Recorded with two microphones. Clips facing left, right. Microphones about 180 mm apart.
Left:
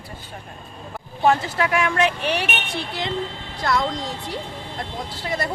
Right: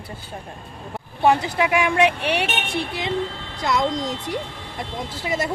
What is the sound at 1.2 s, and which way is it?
Speech, 15° right (ahead or behind).